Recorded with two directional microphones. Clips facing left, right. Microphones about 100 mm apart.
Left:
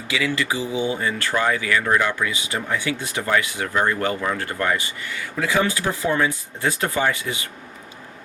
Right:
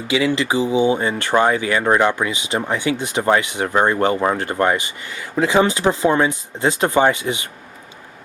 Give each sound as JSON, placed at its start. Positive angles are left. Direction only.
{"t": 0.1, "sound": "speech", "side_deg": -20}